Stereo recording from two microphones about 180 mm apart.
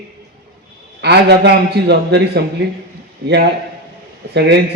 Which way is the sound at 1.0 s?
70° right (ahead or behind).